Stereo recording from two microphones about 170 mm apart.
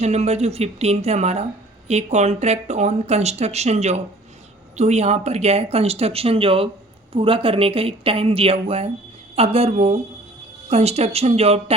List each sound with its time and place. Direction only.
0.0 s speech: 40° right (ahead or behind)